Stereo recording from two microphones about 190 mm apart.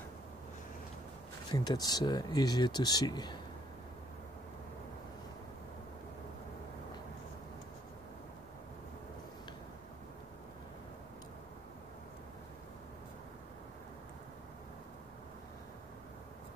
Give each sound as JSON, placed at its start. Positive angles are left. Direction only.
{"t": 1.5, "sound": "speech", "side_deg": 20}